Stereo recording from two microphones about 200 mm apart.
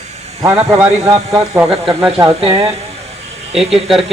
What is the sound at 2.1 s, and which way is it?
Speech, 25° right (ahead or behind).